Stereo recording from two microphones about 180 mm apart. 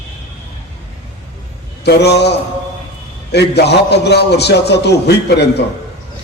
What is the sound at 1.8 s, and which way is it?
Speech, 65° left (ahead or behind).